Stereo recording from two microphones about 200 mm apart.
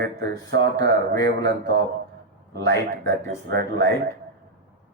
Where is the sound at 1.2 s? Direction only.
60° right (ahead or behind).